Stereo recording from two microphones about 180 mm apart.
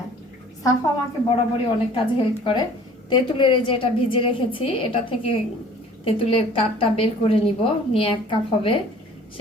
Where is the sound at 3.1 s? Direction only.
25° left (ahead or behind).